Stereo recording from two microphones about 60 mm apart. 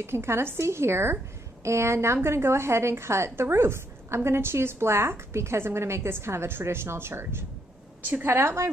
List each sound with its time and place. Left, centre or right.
0.0 s a woman's voice: right